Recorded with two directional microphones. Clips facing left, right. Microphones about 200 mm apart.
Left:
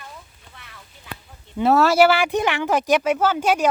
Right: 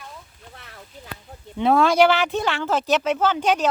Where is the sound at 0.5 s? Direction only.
40° right (ahead or behind).